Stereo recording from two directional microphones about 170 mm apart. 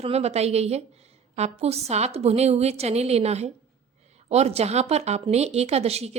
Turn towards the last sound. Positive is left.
turn(degrees=-40)  # may be behind; listen again after turning